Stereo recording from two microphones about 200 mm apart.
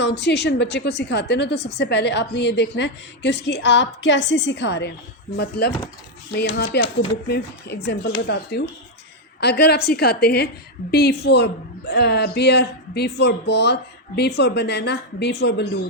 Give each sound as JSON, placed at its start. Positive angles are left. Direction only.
{"t": 0.0, "sound": "a woman's voice", "side_deg": 60}